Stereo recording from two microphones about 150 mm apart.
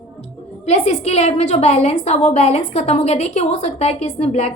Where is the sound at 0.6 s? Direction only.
45° left (ahead or behind).